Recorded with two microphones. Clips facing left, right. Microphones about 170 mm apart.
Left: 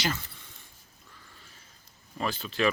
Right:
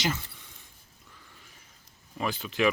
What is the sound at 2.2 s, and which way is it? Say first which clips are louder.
Speech: right 1 dB; 15° right (ahead or behind).